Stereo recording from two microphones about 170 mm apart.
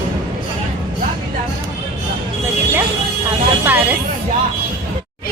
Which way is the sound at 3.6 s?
10° right (ahead or behind).